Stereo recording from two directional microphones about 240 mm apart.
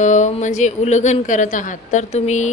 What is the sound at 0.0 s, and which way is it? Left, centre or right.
Speech, left.